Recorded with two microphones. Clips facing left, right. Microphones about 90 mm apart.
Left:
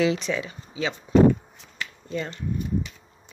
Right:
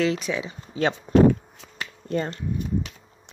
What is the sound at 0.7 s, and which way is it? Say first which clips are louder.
Speech: right 1 dB; 50° right (ahead or behind).